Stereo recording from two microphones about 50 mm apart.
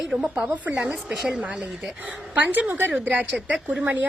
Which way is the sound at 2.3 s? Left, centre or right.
Right.